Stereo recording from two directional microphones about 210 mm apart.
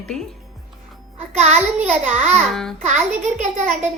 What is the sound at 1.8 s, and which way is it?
Speech, 5° right (ahead or behind).